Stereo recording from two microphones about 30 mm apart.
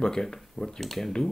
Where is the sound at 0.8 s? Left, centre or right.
Centre.